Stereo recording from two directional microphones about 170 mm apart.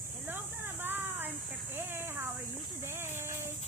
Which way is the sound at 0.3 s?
10° right (ahead or behind).